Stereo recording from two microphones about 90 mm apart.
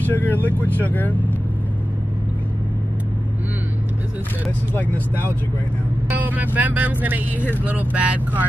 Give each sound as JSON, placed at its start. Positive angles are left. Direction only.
{"t": 0.0, "sound": "speech", "side_deg": 20}
{"t": 4.7, "sound": "speech", "side_deg": 20}
{"t": 6.1, "sound": "speech", "side_deg": -20}